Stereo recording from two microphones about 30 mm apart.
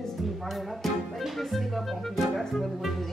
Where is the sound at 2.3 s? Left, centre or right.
Centre.